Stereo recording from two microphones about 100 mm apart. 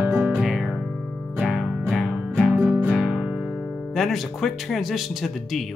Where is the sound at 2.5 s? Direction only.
15° right (ahead or behind).